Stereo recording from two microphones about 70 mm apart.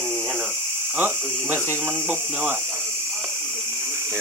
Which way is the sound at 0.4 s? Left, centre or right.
Right.